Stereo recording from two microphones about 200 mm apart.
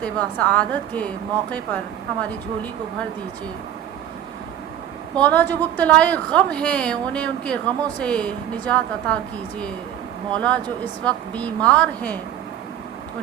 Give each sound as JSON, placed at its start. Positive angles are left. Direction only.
{"t": 0.0, "sound": "a woman's voice", "side_deg": 5}
{"t": 5.1, "sound": "a woman's voice", "side_deg": 10}
{"t": 10.3, "sound": "a woman's voice", "side_deg": 5}